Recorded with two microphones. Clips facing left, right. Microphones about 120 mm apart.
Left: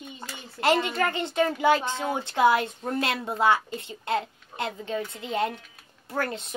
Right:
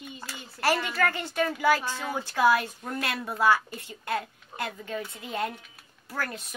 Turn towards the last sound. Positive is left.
turn(degrees=25)  # may be behind; listen again after turning